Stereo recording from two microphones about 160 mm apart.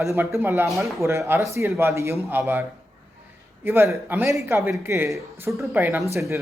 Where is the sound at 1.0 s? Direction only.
15° right (ahead or behind).